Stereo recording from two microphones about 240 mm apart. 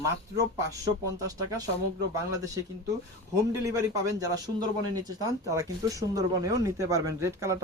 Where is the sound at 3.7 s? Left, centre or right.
Centre.